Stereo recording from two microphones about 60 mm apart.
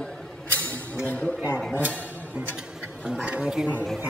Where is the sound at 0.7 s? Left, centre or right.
Left.